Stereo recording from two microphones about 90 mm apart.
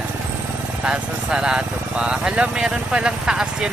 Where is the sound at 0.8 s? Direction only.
10° right (ahead or behind).